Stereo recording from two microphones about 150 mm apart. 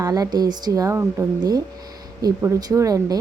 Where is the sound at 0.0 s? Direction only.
25° right (ahead or behind).